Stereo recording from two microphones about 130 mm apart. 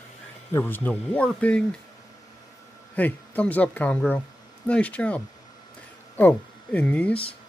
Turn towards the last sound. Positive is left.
turn(degrees=45)  # may be behind; listen again after turning